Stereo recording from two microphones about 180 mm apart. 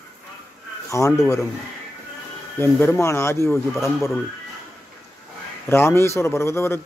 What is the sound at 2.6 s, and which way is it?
Speech, 15° left (ahead or behind).